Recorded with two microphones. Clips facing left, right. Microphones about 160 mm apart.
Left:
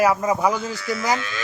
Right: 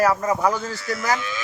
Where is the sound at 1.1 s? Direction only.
70° left (ahead or behind).